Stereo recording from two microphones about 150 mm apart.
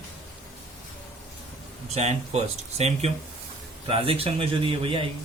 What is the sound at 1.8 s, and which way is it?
Speech, 45° right (ahead or behind).